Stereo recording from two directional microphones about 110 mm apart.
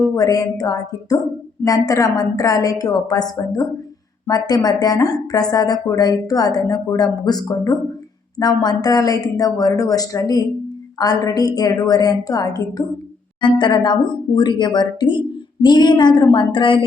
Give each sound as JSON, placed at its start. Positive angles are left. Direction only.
{"t": 0.2, "sound": "speech", "side_deg": 35}